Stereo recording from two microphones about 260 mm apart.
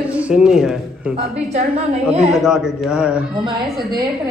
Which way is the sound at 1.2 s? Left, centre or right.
Right.